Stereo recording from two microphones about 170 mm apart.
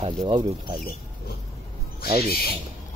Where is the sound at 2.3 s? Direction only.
65° left (ahead or behind).